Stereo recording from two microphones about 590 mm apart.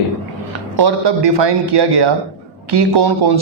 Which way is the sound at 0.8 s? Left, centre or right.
Right.